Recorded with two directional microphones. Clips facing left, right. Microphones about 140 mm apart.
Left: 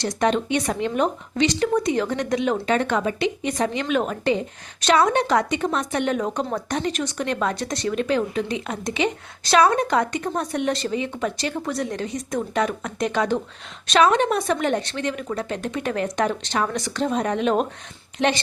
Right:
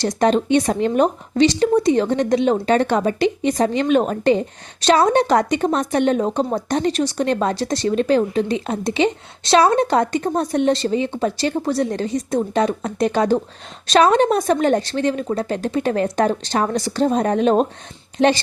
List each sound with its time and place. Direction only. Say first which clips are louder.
0.0 s a woman's voice: right 4 dB; 35° right (ahead or behind)